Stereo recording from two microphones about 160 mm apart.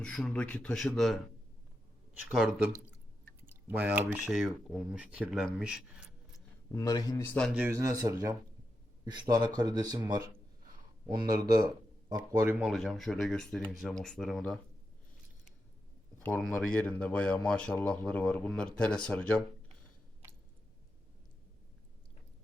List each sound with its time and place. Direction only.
0.0 s speech: 5° left (ahead or behind)
2.3 s speech: 5° right (ahead or behind)
6.7 s speech: 25° left (ahead or behind)
7.3 s speech: 5° left (ahead or behind)
7.6 s speech: 20° right (ahead or behind)
11.3 s a man's voice: 25° right (ahead or behind)
12.7 s speech: centre (ahead or behind)
16.2 s speech: 10° left (ahead or behind)